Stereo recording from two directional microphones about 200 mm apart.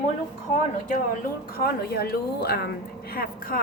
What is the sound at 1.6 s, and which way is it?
A woman's voice, 50° left (ahead or behind).